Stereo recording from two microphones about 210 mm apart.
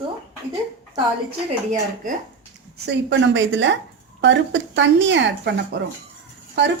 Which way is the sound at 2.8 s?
55° right (ahead or behind).